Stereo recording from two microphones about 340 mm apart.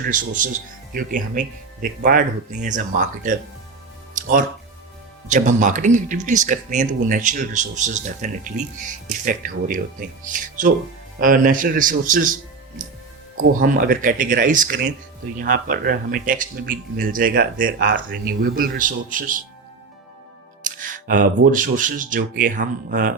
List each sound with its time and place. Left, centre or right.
0.0 s speech: right
4.1 s music: right
5.3 s speech: right
11.2 s speech: right
13.6 s speech: right
20.7 s speech: right